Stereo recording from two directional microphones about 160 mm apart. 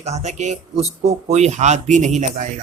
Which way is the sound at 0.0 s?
45° right (ahead or behind).